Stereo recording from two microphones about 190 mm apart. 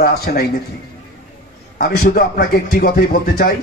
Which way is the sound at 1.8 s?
50° left (ahead or behind).